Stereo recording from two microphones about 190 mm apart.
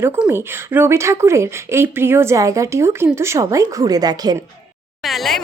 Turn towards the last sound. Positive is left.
turn(degrees=0)  # may be behind; listen again after turning